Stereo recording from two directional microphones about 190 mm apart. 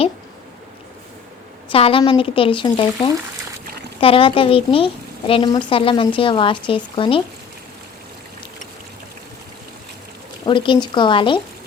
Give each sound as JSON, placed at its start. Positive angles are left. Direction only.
{"t": 1.7, "sound": "a woman's voice", "side_deg": 30}
{"t": 10.4, "sound": "a woman's voice", "side_deg": 25}